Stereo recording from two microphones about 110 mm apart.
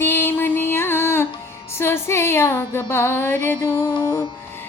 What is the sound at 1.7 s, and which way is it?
Child singing, 20° left (ahead or behind).